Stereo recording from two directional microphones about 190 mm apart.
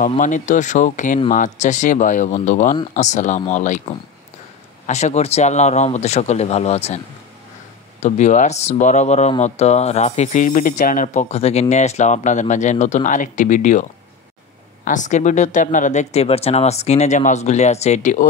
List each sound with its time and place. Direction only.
0.0 s speech: 40° left (ahead or behind)
4.8 s speech: 35° left (ahead or behind)
8.0 s speech: 40° left (ahead or behind)
14.9 s speech: 40° left (ahead or behind)